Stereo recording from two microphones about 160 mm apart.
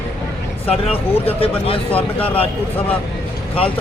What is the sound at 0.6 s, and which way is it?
A man's voice, 35° left (ahead or behind).